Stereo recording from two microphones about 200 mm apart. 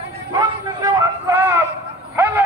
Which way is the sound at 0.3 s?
20° right (ahead or behind).